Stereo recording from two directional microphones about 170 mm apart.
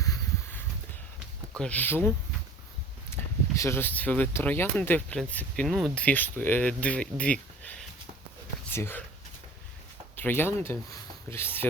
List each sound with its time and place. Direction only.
0.0 s a sound: 20° left (ahead or behind)
1.5 s speech: 5° left (ahead or behind)
10.2 s speech: 15° left (ahead or behind)